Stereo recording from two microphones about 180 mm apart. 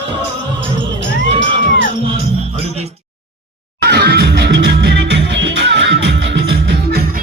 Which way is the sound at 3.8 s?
65° right (ahead or behind).